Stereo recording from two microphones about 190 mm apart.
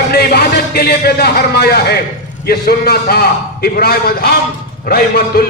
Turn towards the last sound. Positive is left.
turn(degrees=55)  # may be behind; listen again after turning